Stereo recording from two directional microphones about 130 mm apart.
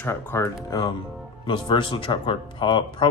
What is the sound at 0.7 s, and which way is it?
Speech, 30° left (ahead or behind).